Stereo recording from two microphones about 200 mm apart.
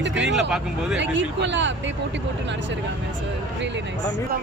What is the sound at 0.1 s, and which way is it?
Speech, 5° right (ahead or behind).